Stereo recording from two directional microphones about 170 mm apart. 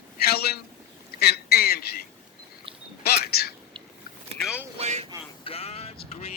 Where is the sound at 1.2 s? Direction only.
65° left (ahead or behind).